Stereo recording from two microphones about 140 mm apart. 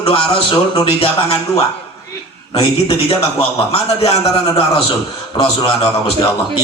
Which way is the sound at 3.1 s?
45° left (ahead or behind).